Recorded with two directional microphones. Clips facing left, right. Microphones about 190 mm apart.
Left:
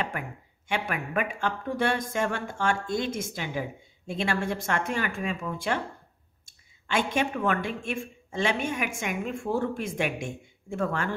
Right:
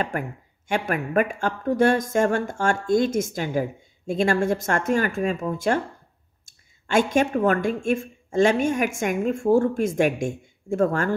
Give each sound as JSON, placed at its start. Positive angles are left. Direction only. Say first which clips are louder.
{"t": 0.1, "sound": "a woman's voice", "louder": "right 7 dB", "side_deg": -45}